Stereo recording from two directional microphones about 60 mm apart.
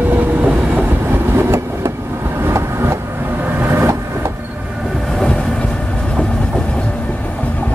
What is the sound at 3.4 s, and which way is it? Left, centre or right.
Vehicle, right.